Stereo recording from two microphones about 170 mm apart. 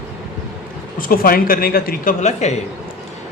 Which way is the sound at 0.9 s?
55° left (ahead or behind).